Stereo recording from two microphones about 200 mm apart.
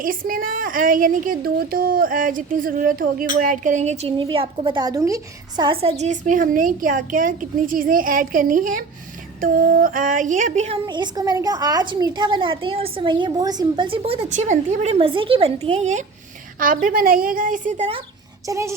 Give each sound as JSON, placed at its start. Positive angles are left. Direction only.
{"t": 0.0, "sound": "speech", "side_deg": -45}
{"t": 10.8, "sound": "a woman's voice", "side_deg": -20}
{"t": 16.8, "sound": "speech", "side_deg": -45}
{"t": 18.4, "sound": "a woman's voice", "side_deg": -15}